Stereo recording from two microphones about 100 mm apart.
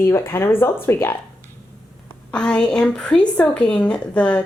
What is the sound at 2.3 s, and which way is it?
A woman's voice, 10° left (ahead or behind).